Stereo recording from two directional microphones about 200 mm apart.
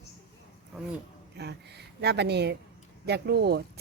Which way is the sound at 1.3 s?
55° right (ahead or behind).